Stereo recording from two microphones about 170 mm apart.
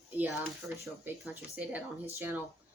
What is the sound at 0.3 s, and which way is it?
Speech, 15° right (ahead or behind).